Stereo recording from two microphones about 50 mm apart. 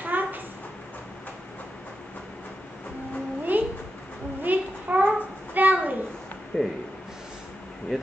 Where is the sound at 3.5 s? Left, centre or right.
Right.